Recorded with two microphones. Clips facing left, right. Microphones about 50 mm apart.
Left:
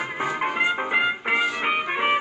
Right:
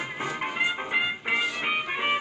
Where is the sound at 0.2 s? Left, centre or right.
Centre.